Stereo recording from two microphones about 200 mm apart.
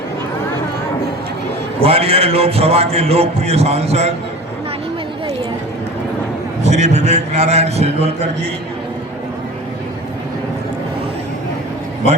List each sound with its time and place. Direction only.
1.8 s a man's voice: 30° right (ahead or behind)
6.6 s a man's voice: 35° right (ahead or behind)